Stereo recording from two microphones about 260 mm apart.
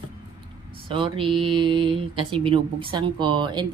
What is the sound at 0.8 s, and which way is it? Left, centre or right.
Speech, centre.